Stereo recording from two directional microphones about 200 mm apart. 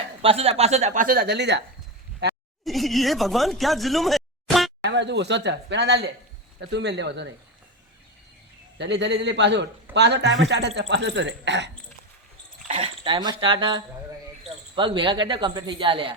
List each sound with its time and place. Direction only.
0.2 s a woman's voice: 30° right (ahead or behind); by 1.6 s 60° right (ahead or behind)
2.6 s speech: centre (ahead or behind)
4.8 s speech: 60° right (ahead or behind)
8.8 s speech: 60° right (ahead or behind)
12.6 s speech: 25° right (ahead or behind)